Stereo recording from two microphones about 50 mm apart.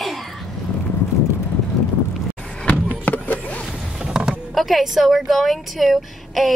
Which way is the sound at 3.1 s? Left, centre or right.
Left.